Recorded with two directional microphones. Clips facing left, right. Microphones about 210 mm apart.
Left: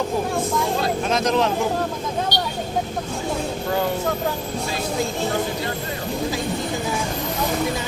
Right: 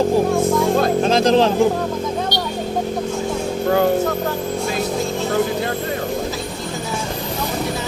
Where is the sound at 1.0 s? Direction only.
30° right (ahead or behind).